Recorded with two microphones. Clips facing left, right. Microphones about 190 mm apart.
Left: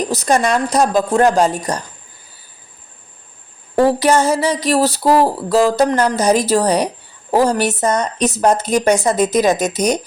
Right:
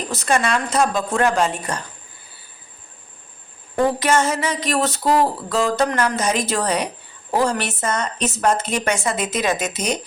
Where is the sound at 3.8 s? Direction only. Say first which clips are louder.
Left 5 dB; 35° left (ahead or behind).